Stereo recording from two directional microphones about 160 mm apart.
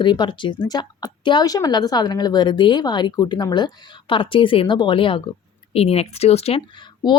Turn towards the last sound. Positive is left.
turn(degrees=30)  # may be behind; listen again after turning